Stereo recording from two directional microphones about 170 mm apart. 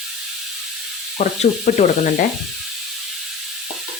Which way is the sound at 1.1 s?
45° left (ahead or behind).